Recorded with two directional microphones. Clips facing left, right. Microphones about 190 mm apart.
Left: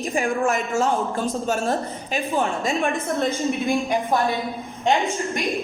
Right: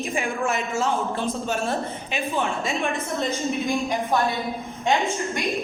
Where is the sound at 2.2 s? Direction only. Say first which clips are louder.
Left 2 dB; centre (ahead or behind).